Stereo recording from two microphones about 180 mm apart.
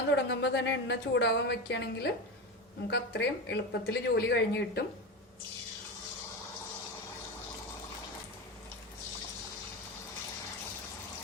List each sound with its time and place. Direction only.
0.1 s speech: 75° left (ahead or behind)